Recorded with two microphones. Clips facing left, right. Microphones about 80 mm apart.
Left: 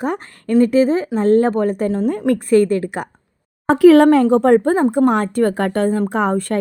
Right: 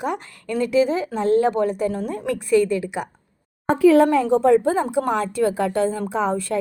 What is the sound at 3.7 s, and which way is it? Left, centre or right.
A woman's voice, left.